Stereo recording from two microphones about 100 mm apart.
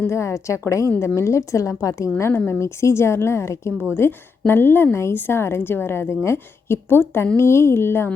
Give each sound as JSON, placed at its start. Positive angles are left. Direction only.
{"t": 0.1, "sound": "a woman's voice", "side_deg": 30}